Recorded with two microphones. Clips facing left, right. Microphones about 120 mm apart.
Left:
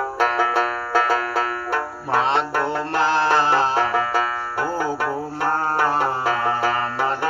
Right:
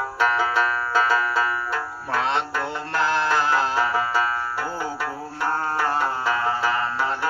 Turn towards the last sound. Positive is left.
turn(degrees=55)  # may be behind; listen again after turning